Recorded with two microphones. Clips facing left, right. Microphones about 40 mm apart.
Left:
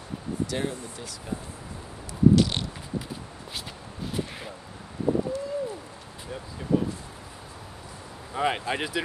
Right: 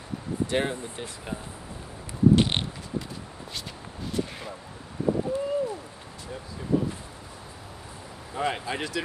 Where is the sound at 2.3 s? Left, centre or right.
Right.